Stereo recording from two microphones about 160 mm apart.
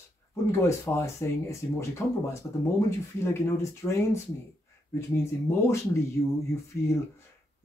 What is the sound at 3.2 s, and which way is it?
Speech, 15° left (ahead or behind).